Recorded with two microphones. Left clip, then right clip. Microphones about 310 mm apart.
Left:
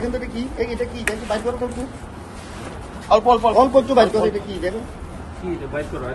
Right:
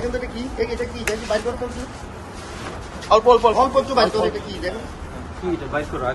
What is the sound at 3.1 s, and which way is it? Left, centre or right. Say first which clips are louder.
Speech: right 1 dB; centre.